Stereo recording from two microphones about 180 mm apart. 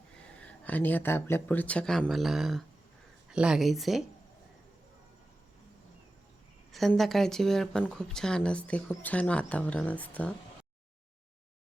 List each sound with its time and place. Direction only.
0.3 s speech: 5° left (ahead or behind)
6.7 s speech: centre (ahead or behind)